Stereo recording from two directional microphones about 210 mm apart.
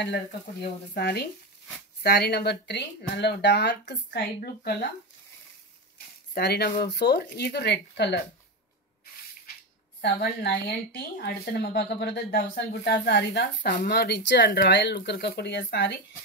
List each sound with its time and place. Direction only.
0.0 s speech: 50° left (ahead or behind)
6.3 s speech: 50° left (ahead or behind)
10.0 s speech: 50° left (ahead or behind)